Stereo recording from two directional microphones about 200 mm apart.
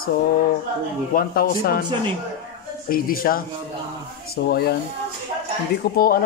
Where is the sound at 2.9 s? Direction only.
45° left (ahead or behind).